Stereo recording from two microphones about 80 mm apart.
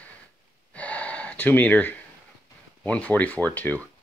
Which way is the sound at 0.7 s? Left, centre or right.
Centre.